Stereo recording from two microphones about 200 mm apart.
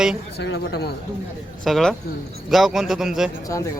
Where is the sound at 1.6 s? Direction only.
Centre (ahead or behind).